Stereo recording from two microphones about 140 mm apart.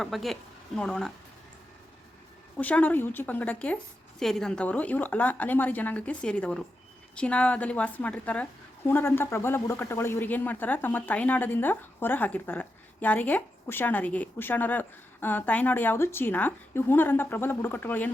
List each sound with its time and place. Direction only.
0.0 s a woman's voice: centre (ahead or behind)
2.6 s speech: 10° left (ahead or behind)